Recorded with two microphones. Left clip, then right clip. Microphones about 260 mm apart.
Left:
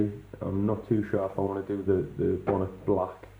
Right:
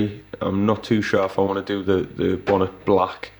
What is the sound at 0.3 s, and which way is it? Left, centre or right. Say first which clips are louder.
Speech: right 9 dB; right.